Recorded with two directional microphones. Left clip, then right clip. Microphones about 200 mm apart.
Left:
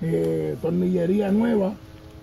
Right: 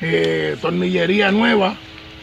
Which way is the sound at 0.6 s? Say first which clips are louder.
Right 5 dB; 5° right (ahead or behind).